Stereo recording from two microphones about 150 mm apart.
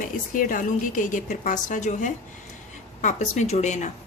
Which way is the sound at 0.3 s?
65° left (ahead or behind).